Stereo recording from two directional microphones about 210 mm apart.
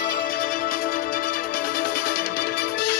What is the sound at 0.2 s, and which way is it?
Music, 40° left (ahead or behind).